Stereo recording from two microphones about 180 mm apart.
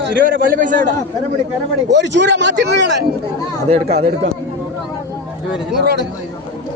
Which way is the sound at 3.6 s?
35° right (ahead or behind).